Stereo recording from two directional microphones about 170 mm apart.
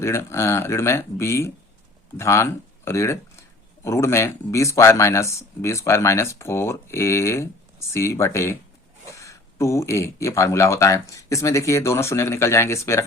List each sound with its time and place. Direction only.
0.0 s speech: 15° left (ahead or behind)